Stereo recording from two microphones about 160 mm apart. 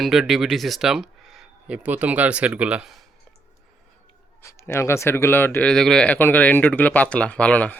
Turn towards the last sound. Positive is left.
turn(degrees=10)  # may be behind; listen again after turning